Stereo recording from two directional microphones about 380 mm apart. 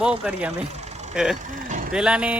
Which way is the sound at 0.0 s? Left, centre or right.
Centre.